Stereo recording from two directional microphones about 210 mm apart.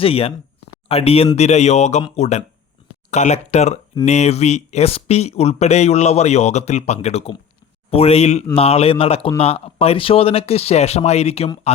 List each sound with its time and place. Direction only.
0.0 s speech: 25° left (ahead or behind)